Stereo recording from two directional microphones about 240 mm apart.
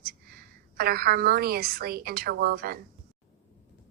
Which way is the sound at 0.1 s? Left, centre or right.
Right.